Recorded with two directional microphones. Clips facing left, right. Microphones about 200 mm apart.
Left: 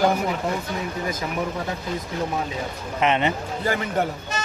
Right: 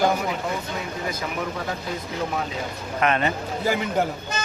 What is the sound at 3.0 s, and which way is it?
Speech, 20° left (ahead or behind).